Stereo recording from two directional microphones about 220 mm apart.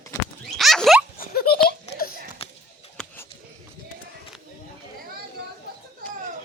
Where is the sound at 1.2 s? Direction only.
45° left (ahead or behind).